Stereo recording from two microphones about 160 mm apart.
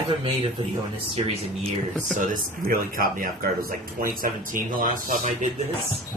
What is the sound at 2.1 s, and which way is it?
Speech, 60° right (ahead or behind).